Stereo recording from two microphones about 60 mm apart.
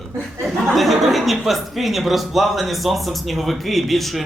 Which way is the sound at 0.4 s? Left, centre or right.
Centre.